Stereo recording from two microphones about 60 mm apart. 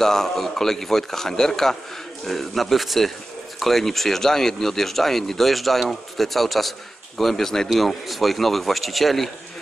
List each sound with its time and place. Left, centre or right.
0.0 s a man's voice: centre